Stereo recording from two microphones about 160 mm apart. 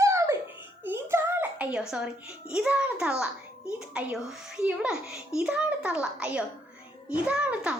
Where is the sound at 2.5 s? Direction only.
5° right (ahead or behind).